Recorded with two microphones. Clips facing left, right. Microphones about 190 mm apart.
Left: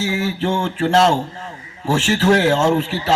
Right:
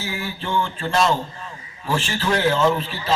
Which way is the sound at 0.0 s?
80° left.